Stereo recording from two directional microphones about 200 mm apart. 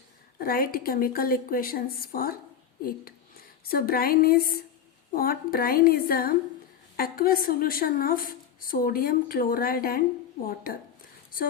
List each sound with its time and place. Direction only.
0.3 s a woman's voice: 45° left (ahead or behind)
3.7 s a woman's voice: 50° left (ahead or behind)